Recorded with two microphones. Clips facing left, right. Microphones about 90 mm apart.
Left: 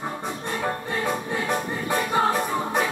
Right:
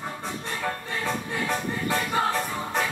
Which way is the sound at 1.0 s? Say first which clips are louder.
Left 1 dB; 15° left (ahead or behind).